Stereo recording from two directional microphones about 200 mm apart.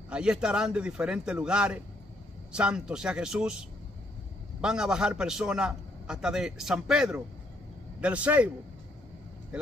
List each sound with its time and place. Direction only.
0.1 s a man's voice: 5° right (ahead or behind)